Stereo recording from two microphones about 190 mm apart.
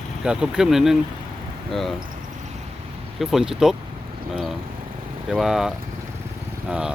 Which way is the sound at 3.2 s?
Centre (ahead or behind).